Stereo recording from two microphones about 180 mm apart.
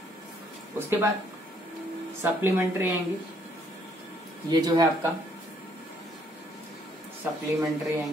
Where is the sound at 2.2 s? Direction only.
15° right (ahead or behind).